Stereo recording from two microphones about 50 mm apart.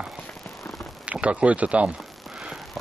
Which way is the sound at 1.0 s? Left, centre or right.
Right.